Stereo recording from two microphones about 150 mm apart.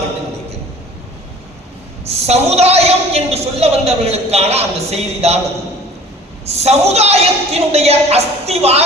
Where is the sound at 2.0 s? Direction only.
45° right (ahead or behind).